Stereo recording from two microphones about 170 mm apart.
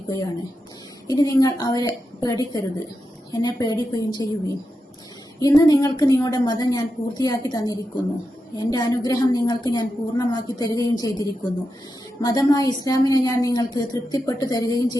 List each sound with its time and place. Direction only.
1.0 s a woman's voice: 20° left (ahead or behind)
5.4 s a woman's voice: 20° left (ahead or behind)